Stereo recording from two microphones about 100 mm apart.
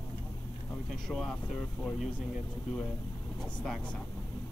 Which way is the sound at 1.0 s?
5° left (ahead or behind).